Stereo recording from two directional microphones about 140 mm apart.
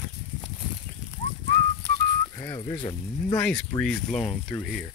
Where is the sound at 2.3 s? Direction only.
20° left (ahead or behind).